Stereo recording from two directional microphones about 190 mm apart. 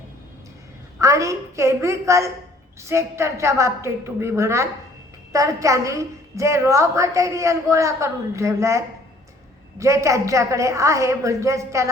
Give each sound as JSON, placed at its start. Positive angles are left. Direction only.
{"t": 0.9, "sound": "a woman's voice", "side_deg": -15}